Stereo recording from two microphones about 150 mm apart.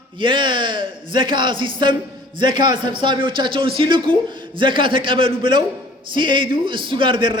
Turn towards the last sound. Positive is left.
turn(degrees=-35)  # may be behind; listen again after turning